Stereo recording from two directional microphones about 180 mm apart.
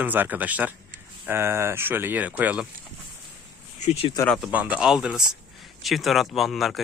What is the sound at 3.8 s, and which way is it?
Speech, 35° left (ahead or behind).